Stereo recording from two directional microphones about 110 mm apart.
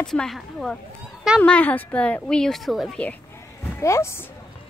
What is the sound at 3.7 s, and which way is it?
Speech, 25° left (ahead or behind).